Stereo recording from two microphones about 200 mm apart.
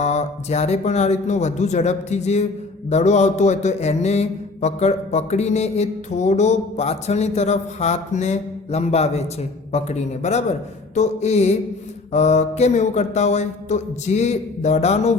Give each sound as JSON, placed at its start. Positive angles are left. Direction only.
{"t": 0.0, "sound": "mantra", "side_deg": 35}